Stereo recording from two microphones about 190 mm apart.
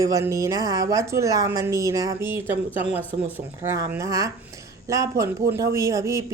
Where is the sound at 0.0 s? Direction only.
15° right (ahead or behind).